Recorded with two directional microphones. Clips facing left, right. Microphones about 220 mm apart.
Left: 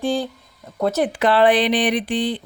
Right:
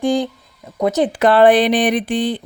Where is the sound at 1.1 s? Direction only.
45° right (ahead or behind).